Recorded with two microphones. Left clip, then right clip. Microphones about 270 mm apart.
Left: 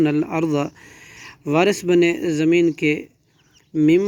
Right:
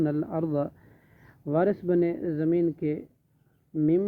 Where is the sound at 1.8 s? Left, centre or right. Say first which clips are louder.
Left 9 dB; left.